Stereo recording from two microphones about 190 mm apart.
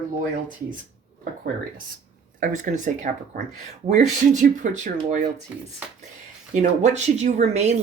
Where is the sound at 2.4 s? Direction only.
40° right (ahead or behind).